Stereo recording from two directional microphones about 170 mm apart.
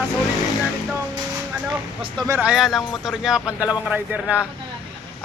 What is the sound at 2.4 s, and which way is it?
Speech, 5° right (ahead or behind).